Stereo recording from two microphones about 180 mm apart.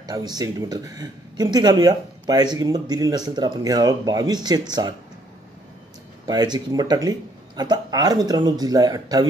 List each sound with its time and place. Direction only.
0.0 s speech: 20° right (ahead or behind)
6.2 s speech: 25° right (ahead or behind)